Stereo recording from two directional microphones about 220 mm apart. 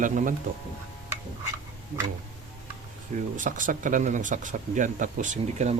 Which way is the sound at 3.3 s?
35° right (ahead or behind).